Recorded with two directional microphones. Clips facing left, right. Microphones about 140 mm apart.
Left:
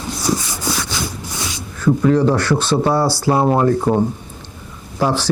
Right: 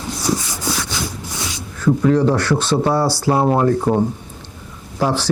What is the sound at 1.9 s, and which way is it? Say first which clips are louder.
Speech: left 1 dB; 30° left (ahead or behind).